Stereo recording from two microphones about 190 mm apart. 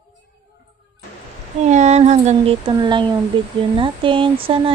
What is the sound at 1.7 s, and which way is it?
A child's voice, 35° right (ahead or behind).